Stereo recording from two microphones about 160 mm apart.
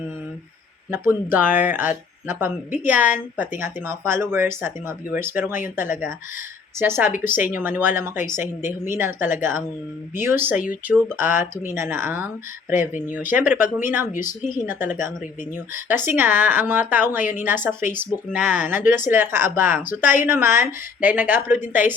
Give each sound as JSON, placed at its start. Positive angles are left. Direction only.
{"t": 0.9, "sound": "a woman's voice", "side_deg": -15}
{"t": 6.7, "sound": "a woman's voice", "side_deg": -15}
{"t": 8.3, "sound": "a woman's voice", "side_deg": 55}
{"t": 8.8, "sound": "a woman's voice", "side_deg": -15}
{"t": 14.1, "sound": "speech", "side_deg": 55}
{"t": 14.7, "sound": "a woman's voice", "side_deg": -10}